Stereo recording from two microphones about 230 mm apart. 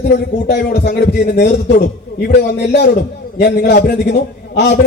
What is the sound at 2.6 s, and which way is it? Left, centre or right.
A man's voice, left.